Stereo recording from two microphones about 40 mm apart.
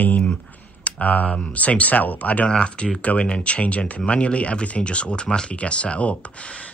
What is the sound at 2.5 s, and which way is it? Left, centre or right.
Speech, left.